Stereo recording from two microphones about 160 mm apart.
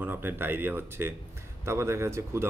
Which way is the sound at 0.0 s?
10° right (ahead or behind).